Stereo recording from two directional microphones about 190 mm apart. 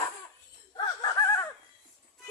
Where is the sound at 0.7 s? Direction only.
20° left (ahead or behind).